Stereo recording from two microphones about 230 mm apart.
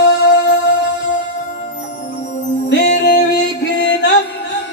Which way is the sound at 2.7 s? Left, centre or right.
Left.